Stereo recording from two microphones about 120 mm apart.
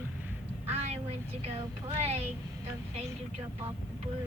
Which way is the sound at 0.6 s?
60° right (ahead or behind).